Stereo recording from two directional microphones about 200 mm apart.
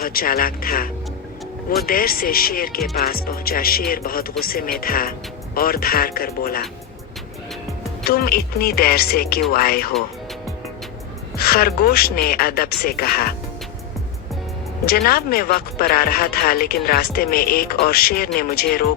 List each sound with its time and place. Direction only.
0.0 s speech: 45° left (ahead or behind)
1.9 s speech: 45° left (ahead or behind)
8.0 s speech: 50° left (ahead or behind)
11.3 s speech: 50° left (ahead or behind)
14.8 s speech: 50° left (ahead or behind)